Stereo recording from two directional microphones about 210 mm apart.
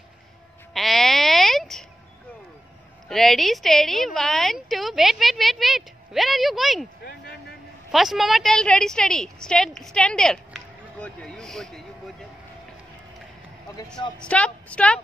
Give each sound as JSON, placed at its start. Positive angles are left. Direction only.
{"t": 0.7, "sound": "a sound", "side_deg": 0}
{"t": 3.1, "sound": "speech", "side_deg": 0}
{"t": 7.1, "sound": "music", "side_deg": 50}
{"t": 7.9, "sound": "a woman's voice", "side_deg": 0}
{"t": 14.2, "sound": "speech", "side_deg": 5}